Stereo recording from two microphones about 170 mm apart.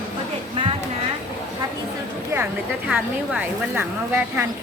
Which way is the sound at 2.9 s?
10° right (ahead or behind).